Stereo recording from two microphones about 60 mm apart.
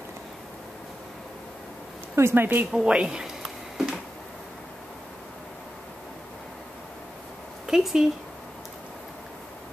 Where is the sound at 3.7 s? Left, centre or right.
Centre.